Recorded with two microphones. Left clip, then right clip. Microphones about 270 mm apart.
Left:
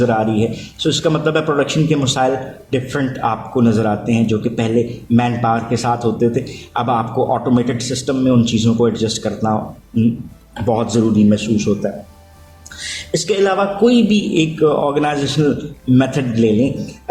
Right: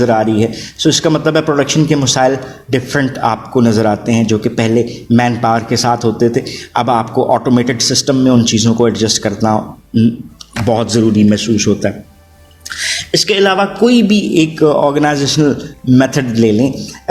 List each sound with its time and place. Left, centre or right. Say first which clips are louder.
0.0 s a man's voice: right 4 dB; right